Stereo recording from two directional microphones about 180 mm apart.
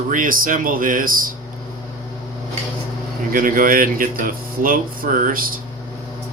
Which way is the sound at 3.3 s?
50° right (ahead or behind).